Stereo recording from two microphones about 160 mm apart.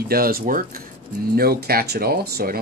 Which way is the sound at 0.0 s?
70° right (ahead or behind).